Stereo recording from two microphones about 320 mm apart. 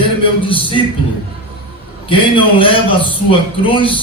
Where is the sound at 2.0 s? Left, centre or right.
Centre.